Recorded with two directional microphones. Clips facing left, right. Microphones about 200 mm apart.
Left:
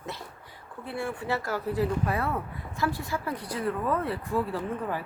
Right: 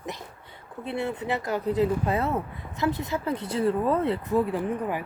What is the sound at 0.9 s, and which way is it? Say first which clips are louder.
Speech: right 3 dB; 20° right (ahead or behind).